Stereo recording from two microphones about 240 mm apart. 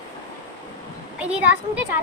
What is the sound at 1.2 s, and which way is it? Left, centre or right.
Speech, centre.